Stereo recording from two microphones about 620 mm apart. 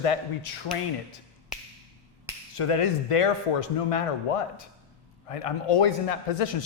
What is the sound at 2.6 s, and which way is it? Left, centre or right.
A man's voice, left.